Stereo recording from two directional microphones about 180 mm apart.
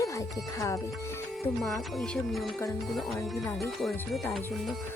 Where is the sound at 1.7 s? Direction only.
Centre (ahead or behind).